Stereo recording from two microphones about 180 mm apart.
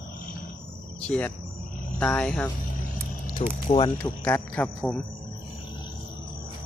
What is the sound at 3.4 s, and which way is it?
Speech, 35° left (ahead or behind).